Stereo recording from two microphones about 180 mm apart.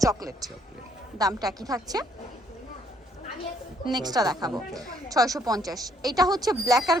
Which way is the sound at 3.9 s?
20° right (ahead or behind).